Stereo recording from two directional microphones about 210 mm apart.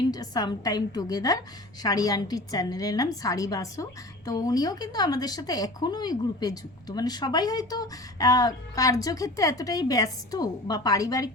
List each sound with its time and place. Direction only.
0.1 s speech: 20° left (ahead or behind)